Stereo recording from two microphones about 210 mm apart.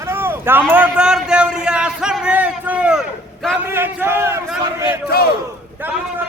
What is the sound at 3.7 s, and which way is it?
A man's voice, 10° right (ahead or behind).